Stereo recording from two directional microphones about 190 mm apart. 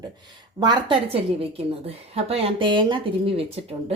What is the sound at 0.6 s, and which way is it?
A woman's voice, 25° right (ahead or behind).